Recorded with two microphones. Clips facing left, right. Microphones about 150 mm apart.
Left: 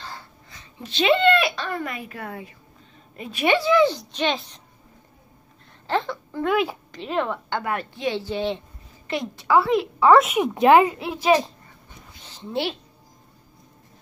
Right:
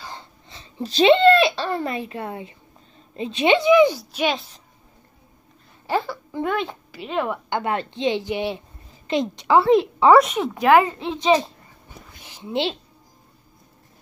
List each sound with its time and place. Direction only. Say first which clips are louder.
0.0 s a child's voice: right 1 dB; 20° right (ahead or behind); by 4.6 s 5° right (ahead or behind)
5.9 s a woman's voice: right 1 dB; 5° right (ahead or behind)
6.4 s speech: left 3 dB; 5° left (ahead or behind)
6.9 s a woman's voice: even; 5° right (ahead or behind)
7.4 s speech: right 3 dB; 20° right (ahead or behind)
10.1 s a child's voice: right 1 dB; 5° left (ahead or behind)
10.4 s speech: left 1 dB; 20° left (ahead or behind); by 11.5 s 5° left (ahead or behind)
12.2 s a sound: right 1 dB; 10° right (ahead or behind)